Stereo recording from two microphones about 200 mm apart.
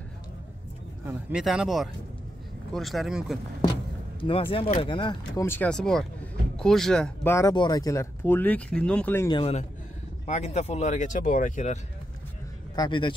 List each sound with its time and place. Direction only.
1.0 s speech: 5° right (ahead or behind)
4.2 s speech: 25° left (ahead or behind); by 7.3 s 5° left (ahead or behind)
7.3 s speech: 20° left (ahead or behind)
9.3 s speech: 30° left (ahead or behind)
12.7 s speech: 20° left (ahead or behind)